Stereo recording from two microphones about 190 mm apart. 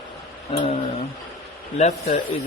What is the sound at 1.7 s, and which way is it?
Speech, 35° left (ahead or behind).